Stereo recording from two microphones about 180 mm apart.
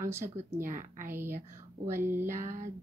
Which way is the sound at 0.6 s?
50° right (ahead or behind).